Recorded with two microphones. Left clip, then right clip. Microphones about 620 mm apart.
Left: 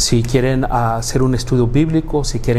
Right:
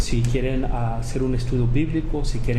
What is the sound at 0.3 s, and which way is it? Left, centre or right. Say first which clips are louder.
Speech: left 10 dB; left.